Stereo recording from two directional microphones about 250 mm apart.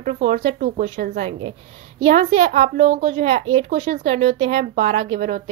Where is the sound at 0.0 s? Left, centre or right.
Right.